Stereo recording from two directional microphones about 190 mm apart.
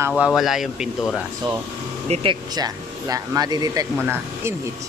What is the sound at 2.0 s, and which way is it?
Speech, 35° right (ahead or behind).